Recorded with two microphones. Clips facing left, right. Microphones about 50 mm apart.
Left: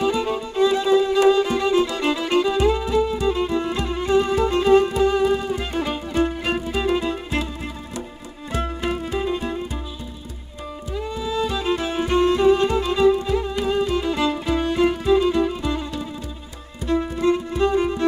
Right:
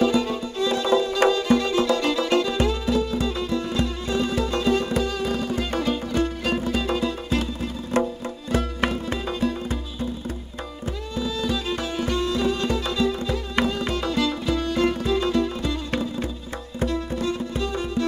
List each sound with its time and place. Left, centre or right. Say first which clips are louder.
0.0 s music: even; centre
7.9 s music: right 9 dB; right
9.2 s music: left 1 dB; left
11.1 s music: left 1 dB; left
16.9 s music: left 11 dB; left